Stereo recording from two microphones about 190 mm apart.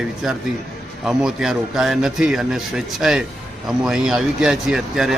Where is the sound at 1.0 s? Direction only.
5° right (ahead or behind).